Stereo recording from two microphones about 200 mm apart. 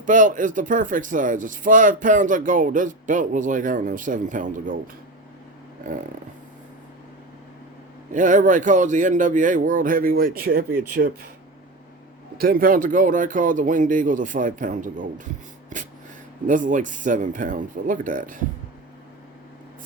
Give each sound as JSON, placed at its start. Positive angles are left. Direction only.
{"t": 0.0, "sound": "speech", "side_deg": -40}
{"t": 8.1, "sound": "speech", "side_deg": -40}
{"t": 12.4, "sound": "speech", "side_deg": -45}
{"t": 15.7, "sound": "a sound", "side_deg": -40}
{"t": 16.5, "sound": "speech", "side_deg": -40}